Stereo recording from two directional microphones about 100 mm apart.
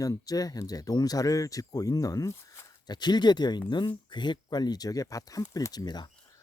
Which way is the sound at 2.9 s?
45° left (ahead or behind).